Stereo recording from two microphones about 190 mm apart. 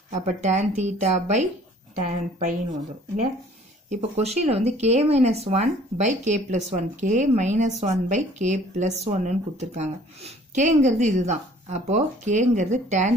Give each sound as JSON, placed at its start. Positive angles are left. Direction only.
{"t": 0.1, "sound": "speech", "side_deg": -40}
{"t": 3.9, "sound": "speech", "side_deg": -35}